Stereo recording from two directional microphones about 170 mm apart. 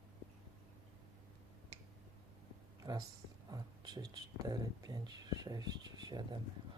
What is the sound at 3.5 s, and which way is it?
Speech, 20° right (ahead or behind).